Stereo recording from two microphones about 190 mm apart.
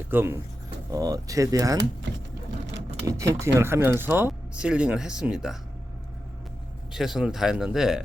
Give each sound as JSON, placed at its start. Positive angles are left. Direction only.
{"t": 0.1, "sound": "speech", "side_deg": -10}
{"t": 3.1, "sound": "speech", "side_deg": -15}
{"t": 6.9, "sound": "speech", "side_deg": 0}